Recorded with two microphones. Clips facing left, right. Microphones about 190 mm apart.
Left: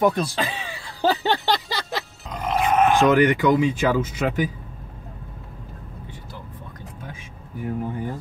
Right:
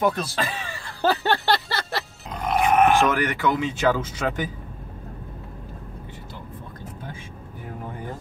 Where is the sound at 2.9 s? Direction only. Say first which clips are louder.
Left 4 dB; 15° left (ahead or behind).